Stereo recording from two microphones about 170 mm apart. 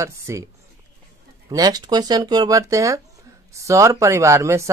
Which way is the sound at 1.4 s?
20° right (ahead or behind).